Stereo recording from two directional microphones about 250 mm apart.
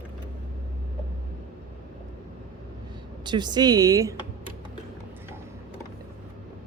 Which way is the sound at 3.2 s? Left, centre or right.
Centre.